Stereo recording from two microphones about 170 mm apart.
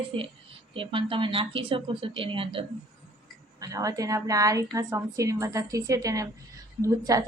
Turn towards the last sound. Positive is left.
turn(degrees=-20)  # may be behind; listen again after turning